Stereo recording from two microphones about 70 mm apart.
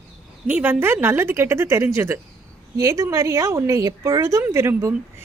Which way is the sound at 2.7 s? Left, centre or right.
Right.